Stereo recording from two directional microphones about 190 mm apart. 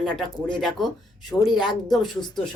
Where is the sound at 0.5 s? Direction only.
Centre (ahead or behind).